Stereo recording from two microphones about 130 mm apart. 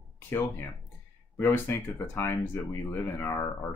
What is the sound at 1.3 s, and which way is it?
Speech, 20° left (ahead or behind).